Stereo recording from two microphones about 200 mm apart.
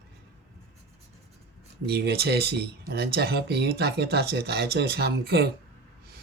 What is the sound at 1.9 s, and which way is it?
Speech, 55° right (ahead or behind).